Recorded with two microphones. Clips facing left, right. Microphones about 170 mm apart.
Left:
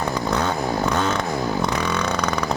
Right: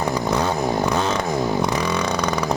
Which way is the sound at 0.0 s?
10° right (ahead or behind).